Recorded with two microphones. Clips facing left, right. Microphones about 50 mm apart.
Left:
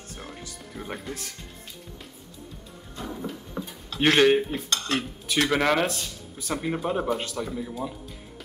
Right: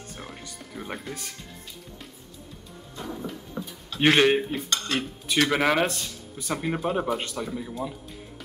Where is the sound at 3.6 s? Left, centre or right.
Centre.